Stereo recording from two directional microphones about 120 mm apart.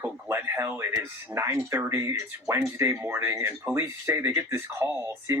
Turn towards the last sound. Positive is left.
turn(degrees=-20)  # may be behind; listen again after turning